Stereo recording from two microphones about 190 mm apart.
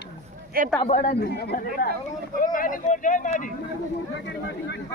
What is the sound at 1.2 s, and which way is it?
Speech, 55° left (ahead or behind).